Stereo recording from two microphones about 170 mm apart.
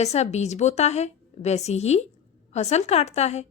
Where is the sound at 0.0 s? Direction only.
40° left (ahead or behind).